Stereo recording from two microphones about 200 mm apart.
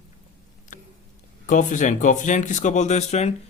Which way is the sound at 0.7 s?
40° left (ahead or behind).